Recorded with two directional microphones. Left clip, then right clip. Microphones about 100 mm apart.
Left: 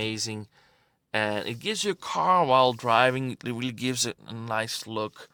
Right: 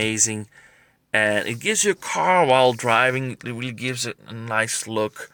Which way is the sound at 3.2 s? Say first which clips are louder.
Right 3 dB; 80° left.